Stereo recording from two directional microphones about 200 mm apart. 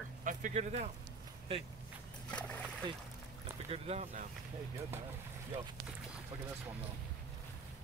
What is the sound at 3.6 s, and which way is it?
Speech, 30° right (ahead or behind).